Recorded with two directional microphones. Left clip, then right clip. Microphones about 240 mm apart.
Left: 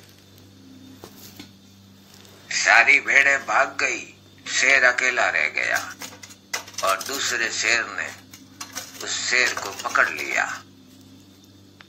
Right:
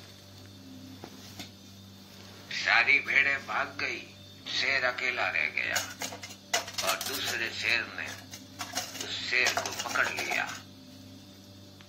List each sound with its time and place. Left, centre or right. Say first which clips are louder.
2.4 s a man's voice: left 9 dB; left
6.8 s speech: left 8 dB; left